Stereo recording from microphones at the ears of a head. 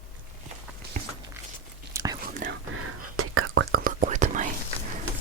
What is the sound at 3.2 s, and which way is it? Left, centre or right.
Whispering, right.